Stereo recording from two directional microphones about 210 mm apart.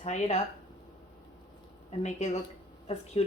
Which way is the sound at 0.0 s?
30° left (ahead or behind).